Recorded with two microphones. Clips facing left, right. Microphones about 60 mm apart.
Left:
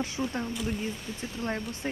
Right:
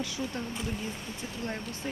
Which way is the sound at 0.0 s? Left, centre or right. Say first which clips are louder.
Left 3 dB; left.